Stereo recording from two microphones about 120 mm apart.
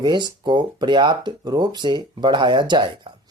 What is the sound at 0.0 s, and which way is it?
Speech, 35° right (ahead or behind).